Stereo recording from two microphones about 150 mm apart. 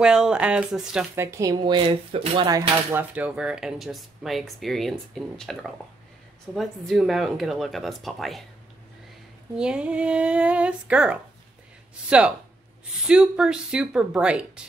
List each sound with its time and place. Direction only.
0.0 s speech: 5° right (ahead or behind)
1.1 s speech: 20° right (ahead or behind)
2.9 s speech: 10° right (ahead or behind)
9.6 s speech: 5° right (ahead or behind)
13.1 s speech: 5° right (ahead or behind)